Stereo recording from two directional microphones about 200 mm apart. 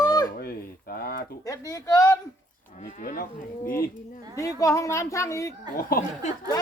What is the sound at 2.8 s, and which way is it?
Cattle, 35° left (ahead or behind).